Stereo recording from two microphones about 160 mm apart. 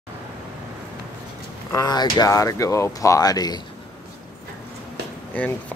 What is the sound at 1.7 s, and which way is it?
Speech, 25° left (ahead or behind).